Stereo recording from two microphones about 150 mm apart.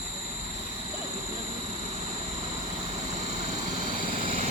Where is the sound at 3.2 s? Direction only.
50° right (ahead or behind).